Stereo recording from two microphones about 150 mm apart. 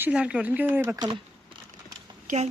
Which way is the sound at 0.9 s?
30° right (ahead or behind).